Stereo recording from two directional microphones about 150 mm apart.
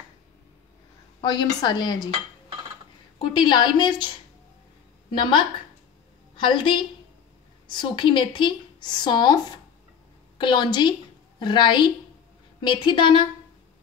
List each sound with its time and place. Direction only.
1.2 s a woman's voice: 25° left (ahead or behind)
3.2 s a woman's voice: 30° left (ahead or behind)
6.3 s a woman's voice: 30° left (ahead or behind)